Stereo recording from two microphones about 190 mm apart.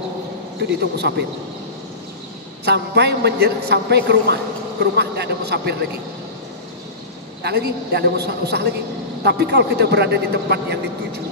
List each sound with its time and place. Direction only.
0.7 s a man's voice: 60° right (ahead or behind)
2.6 s a man's voice: 60° right (ahead or behind)
7.4 s a man's voice: 60° right (ahead or behind)